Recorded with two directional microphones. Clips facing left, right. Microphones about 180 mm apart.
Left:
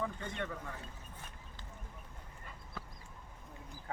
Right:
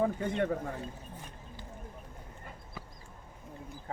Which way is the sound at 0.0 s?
45° right (ahead or behind).